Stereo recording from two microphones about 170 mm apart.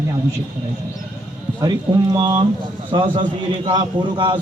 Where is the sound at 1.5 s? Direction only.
25° right (ahead or behind).